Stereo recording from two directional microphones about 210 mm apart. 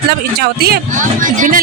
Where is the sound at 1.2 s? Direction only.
40° right (ahead or behind).